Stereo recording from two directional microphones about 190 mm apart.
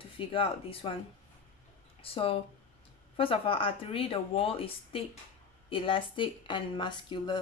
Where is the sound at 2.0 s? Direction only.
30° left (ahead or behind).